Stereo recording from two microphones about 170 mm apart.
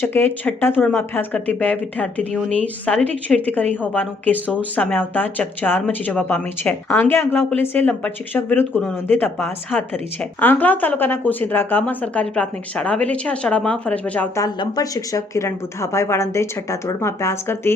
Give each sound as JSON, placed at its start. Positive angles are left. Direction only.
{"t": 0.0, "sound": "speech", "side_deg": 15}
{"t": 14.4, "sound": "speech", "side_deg": 20}